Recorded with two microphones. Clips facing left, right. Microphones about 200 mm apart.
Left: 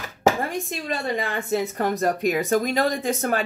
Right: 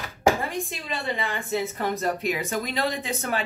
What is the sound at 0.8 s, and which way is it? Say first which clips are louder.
Speech: left 6 dB; 40° left (ahead or behind).